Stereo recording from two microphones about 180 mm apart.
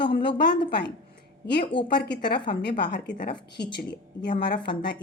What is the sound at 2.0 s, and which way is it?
A woman's voice, 65° left (ahead or behind).